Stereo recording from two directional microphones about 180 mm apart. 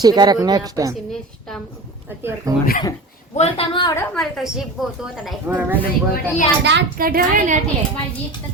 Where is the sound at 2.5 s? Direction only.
15° right (ahead or behind).